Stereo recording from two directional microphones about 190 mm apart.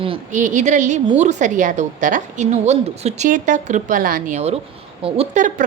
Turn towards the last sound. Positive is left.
turn(degrees=-40)  # may be behind; listen again after turning